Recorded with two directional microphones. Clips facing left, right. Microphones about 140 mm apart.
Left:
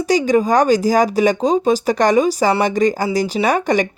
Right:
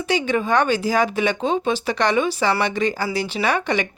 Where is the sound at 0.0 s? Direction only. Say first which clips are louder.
Left 6 dB; 40° left (ahead or behind).